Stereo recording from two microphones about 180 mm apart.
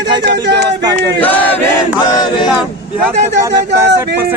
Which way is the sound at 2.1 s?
25° left (ahead or behind).